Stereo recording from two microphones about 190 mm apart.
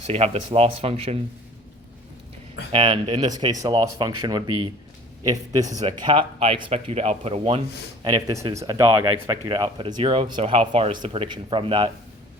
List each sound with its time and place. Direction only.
0.1 s speech: 35° right (ahead or behind)
2.7 s speech: 25° right (ahead or behind)
8.0 s speech: 20° right (ahead or behind)